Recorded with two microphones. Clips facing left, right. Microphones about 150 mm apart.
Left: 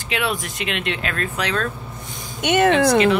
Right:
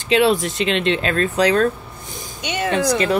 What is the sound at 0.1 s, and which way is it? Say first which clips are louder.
Speech: right 9 dB; 25° right (ahead or behind).